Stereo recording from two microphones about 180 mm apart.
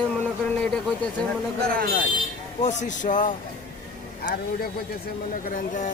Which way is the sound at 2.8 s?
45° left (ahead or behind).